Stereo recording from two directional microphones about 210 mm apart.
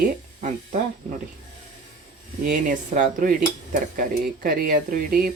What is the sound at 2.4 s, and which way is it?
Speech, 40° right (ahead or behind).